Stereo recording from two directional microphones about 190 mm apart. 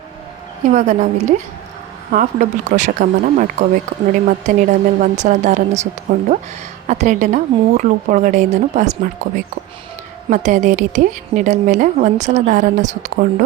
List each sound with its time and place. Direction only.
0.7 s a woman's voice: 40° right (ahead or behind)
10.2 s a woman's voice: 40° right (ahead or behind)